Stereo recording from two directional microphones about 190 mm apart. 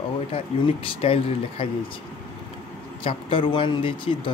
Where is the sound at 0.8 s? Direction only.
30° left (ahead or behind).